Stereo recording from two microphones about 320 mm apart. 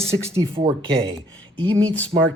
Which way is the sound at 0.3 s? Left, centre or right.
Centre.